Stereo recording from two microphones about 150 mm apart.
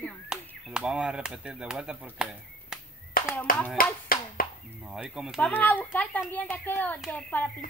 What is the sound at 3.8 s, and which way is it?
Speech, 70° left (ahead or behind).